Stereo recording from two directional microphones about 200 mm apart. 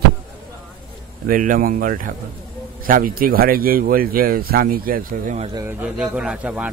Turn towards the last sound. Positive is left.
turn(degrees=-5)  # may be behind; listen again after turning